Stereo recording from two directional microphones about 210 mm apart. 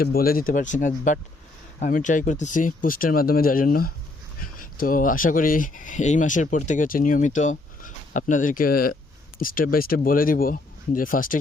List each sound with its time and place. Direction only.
0.0 s speech: 45° left (ahead or behind)